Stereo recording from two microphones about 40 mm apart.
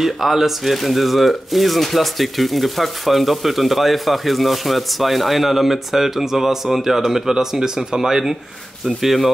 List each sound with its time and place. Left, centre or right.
0.0 s speech: centre